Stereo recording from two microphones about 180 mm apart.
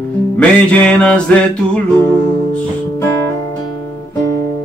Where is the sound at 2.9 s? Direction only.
15° left (ahead or behind).